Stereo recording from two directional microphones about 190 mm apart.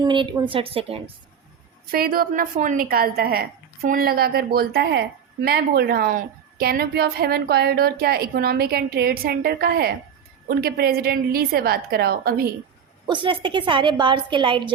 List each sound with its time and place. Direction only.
0.0 s a woman's voice: 25° right (ahead or behind)
1.9 s a woman's voice: 50° right (ahead or behind)
13.1 s a woman's voice: 25° right (ahead or behind)